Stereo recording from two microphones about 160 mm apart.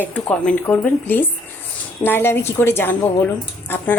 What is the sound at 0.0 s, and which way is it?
Speech, 10° left (ahead or behind).